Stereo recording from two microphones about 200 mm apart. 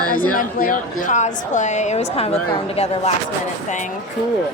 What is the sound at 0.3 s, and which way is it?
A woman's voice, 45° left (ahead or behind).